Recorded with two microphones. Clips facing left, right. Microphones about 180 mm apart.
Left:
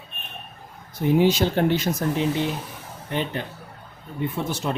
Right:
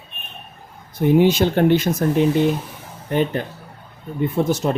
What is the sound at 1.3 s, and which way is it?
Speech, 50° right (ahead or behind).